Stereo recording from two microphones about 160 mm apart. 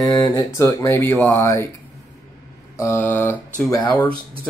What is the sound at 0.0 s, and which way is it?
Speech, 25° left (ahead or behind).